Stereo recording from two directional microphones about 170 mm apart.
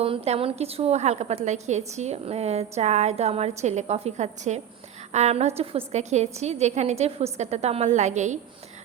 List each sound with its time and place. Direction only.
0.0 s a woman's voice: 35° right (ahead or behind)